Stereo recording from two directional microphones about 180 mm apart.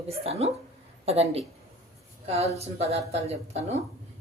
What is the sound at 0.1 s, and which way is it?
Speech, 35° right (ahead or behind).